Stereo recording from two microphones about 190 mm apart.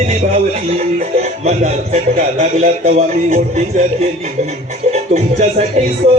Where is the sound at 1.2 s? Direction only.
35° right (ahead or behind).